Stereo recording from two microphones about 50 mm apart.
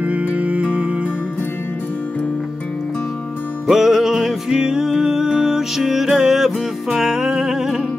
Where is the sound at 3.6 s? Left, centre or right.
Centre.